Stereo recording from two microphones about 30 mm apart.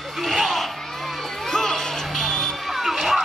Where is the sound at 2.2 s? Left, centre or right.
Centre.